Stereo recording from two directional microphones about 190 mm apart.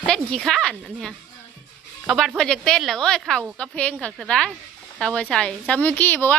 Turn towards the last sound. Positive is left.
turn(degrees=10)  # may be behind; listen again after turning